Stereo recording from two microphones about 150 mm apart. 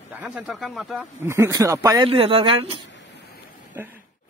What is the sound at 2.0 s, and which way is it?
Speech, 40° right (ahead or behind).